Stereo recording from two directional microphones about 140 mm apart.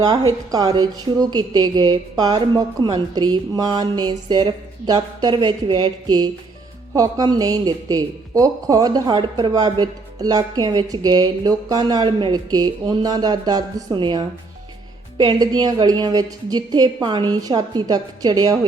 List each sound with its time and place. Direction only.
0.0 s a woman's voice: 30° right (ahead or behind)